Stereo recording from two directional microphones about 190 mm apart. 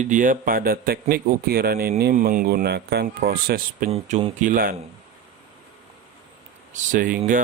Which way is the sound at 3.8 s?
30° right (ahead or behind).